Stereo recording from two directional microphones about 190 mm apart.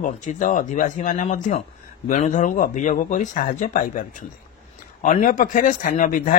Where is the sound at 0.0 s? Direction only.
40° left (ahead or behind).